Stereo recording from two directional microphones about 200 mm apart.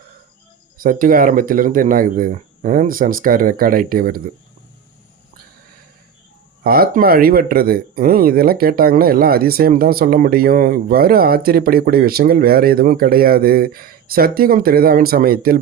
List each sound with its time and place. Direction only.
0.8 s speech: 45° right (ahead or behind)
6.7 s speech: 50° right (ahead or behind)